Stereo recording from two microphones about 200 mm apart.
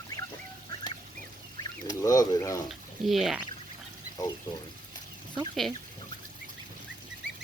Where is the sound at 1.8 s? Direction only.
15° left (ahead or behind).